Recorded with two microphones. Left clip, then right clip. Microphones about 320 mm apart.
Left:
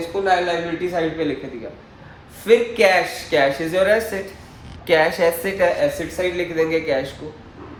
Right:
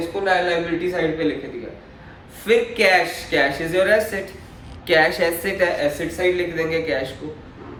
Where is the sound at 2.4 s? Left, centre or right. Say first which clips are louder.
Left 2 dB; centre.